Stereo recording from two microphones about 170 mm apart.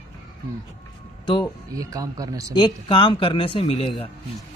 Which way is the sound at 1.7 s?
20° right (ahead or behind).